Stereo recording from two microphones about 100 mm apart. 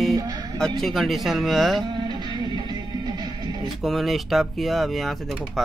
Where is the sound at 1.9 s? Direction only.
45° right (ahead or behind).